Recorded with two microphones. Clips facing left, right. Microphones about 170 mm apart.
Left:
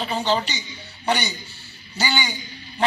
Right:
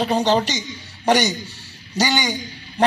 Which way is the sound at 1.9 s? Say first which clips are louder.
Right 5 dB; 40° right (ahead or behind).